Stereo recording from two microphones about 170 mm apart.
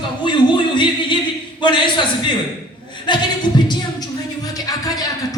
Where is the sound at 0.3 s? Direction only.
30° left (ahead or behind).